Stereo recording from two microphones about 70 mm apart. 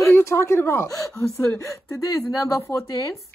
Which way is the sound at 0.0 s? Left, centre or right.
Left.